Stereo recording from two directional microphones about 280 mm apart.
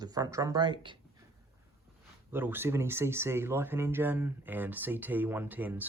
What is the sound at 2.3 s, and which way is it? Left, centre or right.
Speech, centre.